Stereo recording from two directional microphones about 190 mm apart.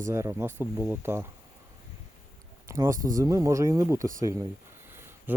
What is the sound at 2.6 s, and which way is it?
A man's voice, 15° right (ahead or behind).